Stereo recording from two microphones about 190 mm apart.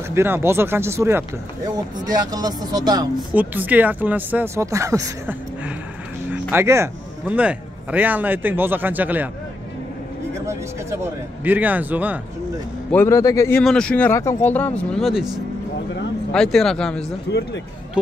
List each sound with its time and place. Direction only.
0.1 s speech: 10° right (ahead or behind)
3.2 s speech: 10° right (ahead or behind)
10.4 s a sound: 15° right (ahead or behind)
11.4 s speech: 10° right (ahead or behind)
12.9 s speech: 15° left (ahead or behind)
13.6 s speech: 5° left (ahead or behind)
17.3 s speech: 65° left (ahead or behind)